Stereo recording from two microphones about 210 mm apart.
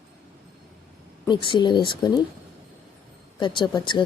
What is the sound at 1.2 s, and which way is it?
Speech, 20° left (ahead or behind).